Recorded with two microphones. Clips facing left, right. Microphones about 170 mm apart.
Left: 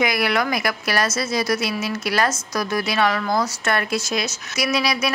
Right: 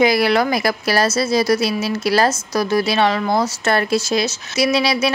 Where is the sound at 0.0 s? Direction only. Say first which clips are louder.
Right 6 dB; 30° right (ahead or behind).